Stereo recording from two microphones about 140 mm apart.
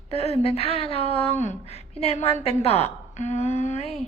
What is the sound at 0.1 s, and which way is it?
A woman's voice, 45° left (ahead or behind).